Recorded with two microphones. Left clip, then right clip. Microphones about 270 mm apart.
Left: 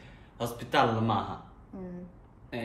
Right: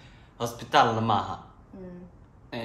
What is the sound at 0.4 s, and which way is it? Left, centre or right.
Speech, centre.